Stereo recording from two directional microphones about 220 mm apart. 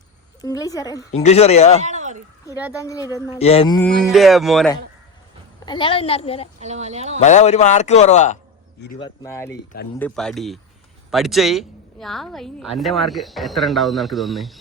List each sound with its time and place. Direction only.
0.4 s speech: 15° left (ahead or behind)
1.1 s a woman's voice: 30° left (ahead or behind)
1.8 s a sound: 35° right (ahead or behind)
2.7 s speech: 15° left (ahead or behind)
3.3 s a woman's voice: 25° left (ahead or behind)
3.8 s a woman's voice: centre (ahead or behind)
5.6 s a woman's voice: 20° left (ahead or behind)
6.6 s speech: 30° right (ahead or behind)
7.2 s speech: 30° left (ahead or behind)
9.0 s a woman's voice: 15° left (ahead or behind); by 14.6 s centre (ahead or behind)